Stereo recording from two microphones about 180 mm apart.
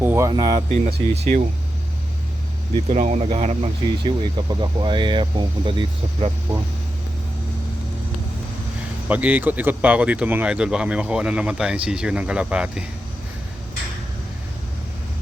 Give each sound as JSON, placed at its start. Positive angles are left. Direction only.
{"t": 0.0, "sound": "speech", "side_deg": -10}
{"t": 1.1, "sound": "speech", "side_deg": -35}
{"t": 2.9, "sound": "speech", "side_deg": -40}
{"t": 9.0, "sound": "speech", "side_deg": -10}